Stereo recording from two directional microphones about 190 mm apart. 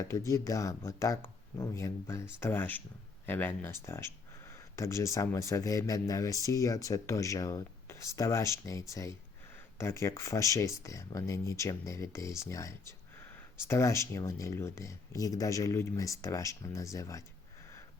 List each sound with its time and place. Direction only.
0.3 s speech: 15° left (ahead or behind)